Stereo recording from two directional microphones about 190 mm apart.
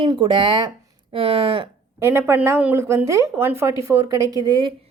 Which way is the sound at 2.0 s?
10° right (ahead or behind).